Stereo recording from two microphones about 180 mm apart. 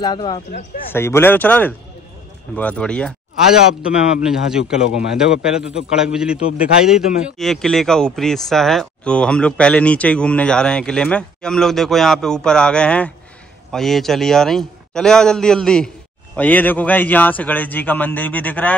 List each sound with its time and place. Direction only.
0.0 s speech: 25° left (ahead or behind)
0.5 s speech: 50° left (ahead or behind)
0.9 s a man's voice: 15° left (ahead or behind)